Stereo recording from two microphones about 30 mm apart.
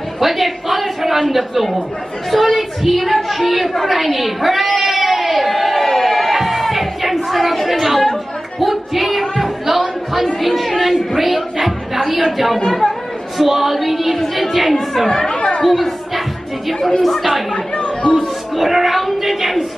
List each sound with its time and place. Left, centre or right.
0.2 s a sound: centre
1.3 s speech: centre
3.3 s a sound: centre
7.6 s chatter: centre
8.5 s music: centre
9.4 s a sound: centre
13.4 s speech: centre
15.0 s speech: left
15.6 s speech: centre
17.0 s speech: centre
17.7 s chatter: left
18.6 s a sound: centre